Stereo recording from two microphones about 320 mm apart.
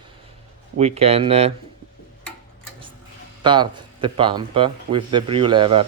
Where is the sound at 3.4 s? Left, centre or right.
Centre.